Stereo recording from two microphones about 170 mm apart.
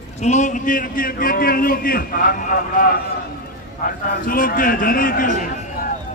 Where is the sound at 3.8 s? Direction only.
55° left (ahead or behind).